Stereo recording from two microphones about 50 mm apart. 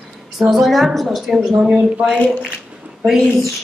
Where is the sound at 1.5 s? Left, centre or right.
Right.